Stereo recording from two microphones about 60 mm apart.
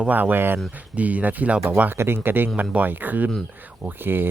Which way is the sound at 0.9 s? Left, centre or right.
Right.